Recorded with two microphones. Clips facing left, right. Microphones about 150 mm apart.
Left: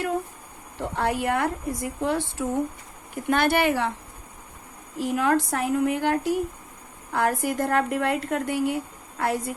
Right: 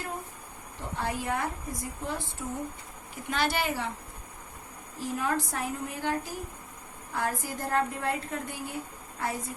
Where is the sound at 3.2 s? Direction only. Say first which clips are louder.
Left 8 dB; 55° left (ahead or behind).